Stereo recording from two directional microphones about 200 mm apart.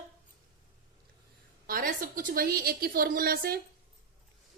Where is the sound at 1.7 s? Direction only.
45° right (ahead or behind).